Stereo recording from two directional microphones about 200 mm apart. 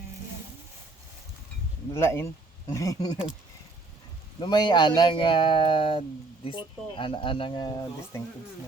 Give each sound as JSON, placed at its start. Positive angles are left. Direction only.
{"t": 1.9, "sound": "speech", "side_deg": 15}
{"t": 4.4, "sound": "speech", "side_deg": 20}